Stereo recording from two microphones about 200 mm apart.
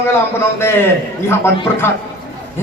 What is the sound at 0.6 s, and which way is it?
A man's voice, 10° left (ahead or behind).